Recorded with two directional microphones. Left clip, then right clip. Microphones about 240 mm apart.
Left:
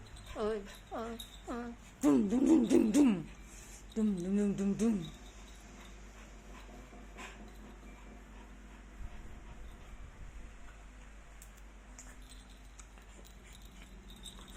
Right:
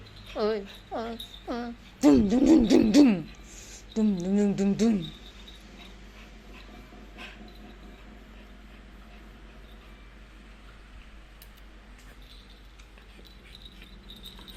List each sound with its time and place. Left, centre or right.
0.3 s a woman's voice: right